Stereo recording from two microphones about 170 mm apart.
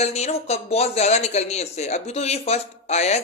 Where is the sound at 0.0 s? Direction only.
40° left (ahead or behind).